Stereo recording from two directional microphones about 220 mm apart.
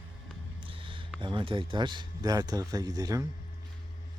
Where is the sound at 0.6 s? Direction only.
25° right (ahead or behind).